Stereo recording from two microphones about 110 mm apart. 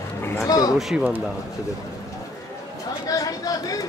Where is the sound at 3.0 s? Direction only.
35° left (ahead or behind).